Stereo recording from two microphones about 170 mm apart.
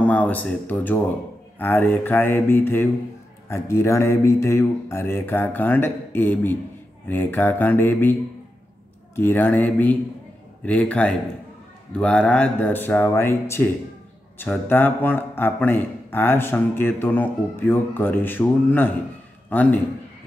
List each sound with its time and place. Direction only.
0.0 s speech: 10° left (ahead or behind)